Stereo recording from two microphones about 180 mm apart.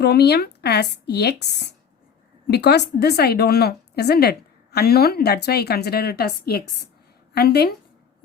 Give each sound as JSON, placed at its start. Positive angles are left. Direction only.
{"t": 0.0, "sound": "a woman's voice", "side_deg": 65}